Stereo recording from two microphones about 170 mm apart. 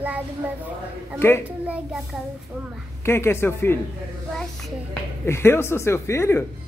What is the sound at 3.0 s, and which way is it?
Speech, 15° left (ahead or behind).